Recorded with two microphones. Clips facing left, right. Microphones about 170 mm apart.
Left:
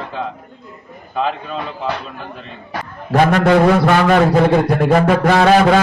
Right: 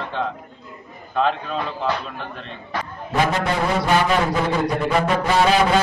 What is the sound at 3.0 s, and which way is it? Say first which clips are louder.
A man's voice: left 8 dB; 70° left (ahead or behind).